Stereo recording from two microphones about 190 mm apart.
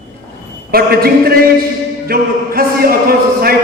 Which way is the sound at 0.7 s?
50° right (ahead or behind).